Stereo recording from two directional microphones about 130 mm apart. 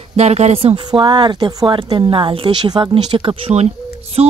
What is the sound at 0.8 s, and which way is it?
Speech, 35° right (ahead or behind).